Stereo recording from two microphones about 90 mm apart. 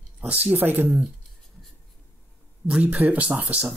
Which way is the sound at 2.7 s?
15° right (ahead or behind).